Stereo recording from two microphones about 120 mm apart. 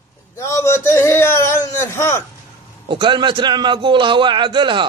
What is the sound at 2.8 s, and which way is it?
Speech, 40° right (ahead or behind).